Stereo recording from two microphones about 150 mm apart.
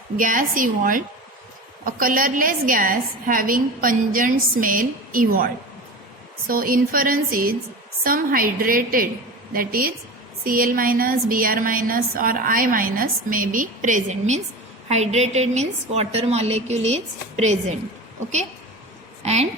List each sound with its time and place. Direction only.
0.2 s a woman's voice: 65° right (ahead or behind)
6.5 s a woman's voice: 70° right (ahead or behind); by 17.7 s 45° right (ahead or behind)
19.2 s a woman's voice: 45° right (ahead or behind)